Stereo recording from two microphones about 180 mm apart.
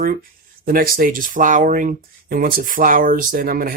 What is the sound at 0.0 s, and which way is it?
Speech, 55° right (ahead or behind).